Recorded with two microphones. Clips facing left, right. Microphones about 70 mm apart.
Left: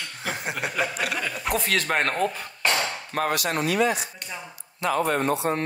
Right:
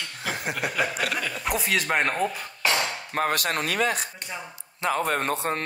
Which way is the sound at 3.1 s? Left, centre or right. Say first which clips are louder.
Even; right.